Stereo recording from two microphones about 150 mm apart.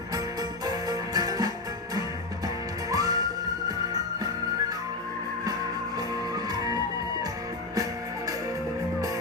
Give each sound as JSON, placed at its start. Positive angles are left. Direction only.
{"t": 0.6, "sound": "music", "side_deg": -25}
{"t": 2.9, "sound": "music", "side_deg": -25}
{"t": 6.0, "sound": "music", "side_deg": -25}